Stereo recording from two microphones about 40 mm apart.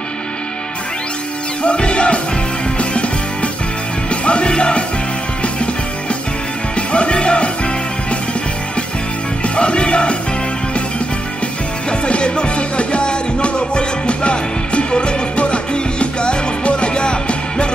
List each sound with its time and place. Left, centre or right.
1.6 s music: left
4.1 s music: left
6.9 s music: left
9.4 s music: left
11.9 s music: left